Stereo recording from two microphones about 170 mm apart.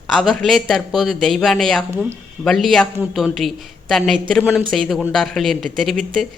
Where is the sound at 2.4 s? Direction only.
Centre (ahead or behind).